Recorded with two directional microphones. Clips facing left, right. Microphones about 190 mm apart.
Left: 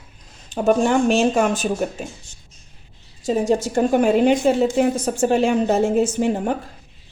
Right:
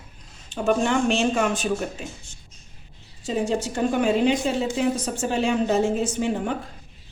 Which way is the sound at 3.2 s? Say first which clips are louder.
Left 5 dB; 45° left (ahead or behind).